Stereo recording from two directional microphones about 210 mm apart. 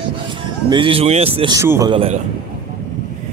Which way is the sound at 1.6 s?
15° right (ahead or behind).